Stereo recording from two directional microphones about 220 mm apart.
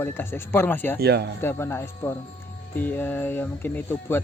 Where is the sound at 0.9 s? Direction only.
45° right (ahead or behind).